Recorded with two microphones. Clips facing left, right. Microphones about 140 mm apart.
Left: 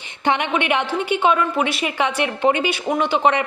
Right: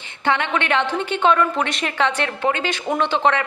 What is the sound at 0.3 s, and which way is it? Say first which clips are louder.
Speech: left 1 dB; 15° left (ahead or behind).